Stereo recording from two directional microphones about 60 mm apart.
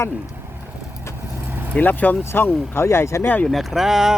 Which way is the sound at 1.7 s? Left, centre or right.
Left.